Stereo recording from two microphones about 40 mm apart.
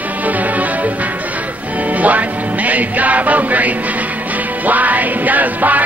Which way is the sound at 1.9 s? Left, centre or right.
Right.